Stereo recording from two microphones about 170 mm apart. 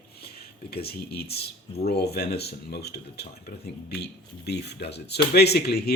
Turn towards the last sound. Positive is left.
turn(degrees=70)  # may be behind; listen again after turning